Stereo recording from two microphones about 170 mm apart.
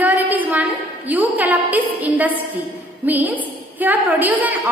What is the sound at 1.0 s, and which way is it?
A woman's voice, 10° right (ahead or behind).